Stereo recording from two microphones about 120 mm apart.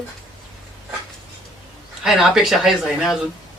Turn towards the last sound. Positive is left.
turn(degrees=0)  # may be behind; listen again after turning